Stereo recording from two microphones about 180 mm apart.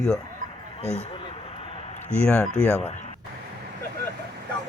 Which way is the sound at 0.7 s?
35° left (ahead or behind).